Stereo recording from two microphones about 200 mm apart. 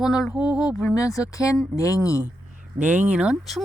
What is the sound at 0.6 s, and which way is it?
Speech, 15° left (ahead or behind).